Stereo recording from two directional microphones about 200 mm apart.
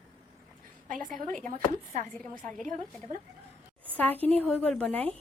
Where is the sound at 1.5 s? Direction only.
40° right (ahead or behind).